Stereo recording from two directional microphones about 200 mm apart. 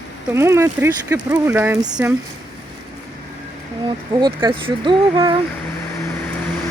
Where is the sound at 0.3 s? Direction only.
15° right (ahead or behind).